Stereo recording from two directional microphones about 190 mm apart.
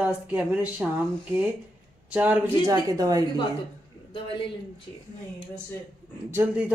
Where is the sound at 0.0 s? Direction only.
10° right (ahead or behind).